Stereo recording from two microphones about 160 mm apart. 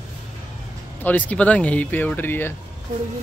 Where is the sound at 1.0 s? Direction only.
10° left (ahead or behind).